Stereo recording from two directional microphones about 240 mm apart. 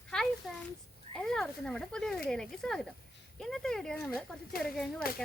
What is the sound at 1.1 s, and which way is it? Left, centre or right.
A woman's voice, centre.